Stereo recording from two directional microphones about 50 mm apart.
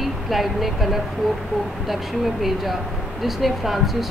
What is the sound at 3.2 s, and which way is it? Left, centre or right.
Speech, centre.